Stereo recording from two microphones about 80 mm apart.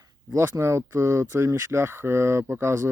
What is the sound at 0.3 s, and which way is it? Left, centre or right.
Speech, right.